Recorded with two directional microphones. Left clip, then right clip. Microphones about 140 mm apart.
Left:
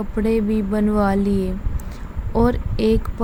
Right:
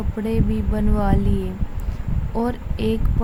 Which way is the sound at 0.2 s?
30° left (ahead or behind).